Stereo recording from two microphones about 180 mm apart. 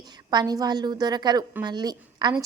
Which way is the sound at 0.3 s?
20° right (ahead or behind).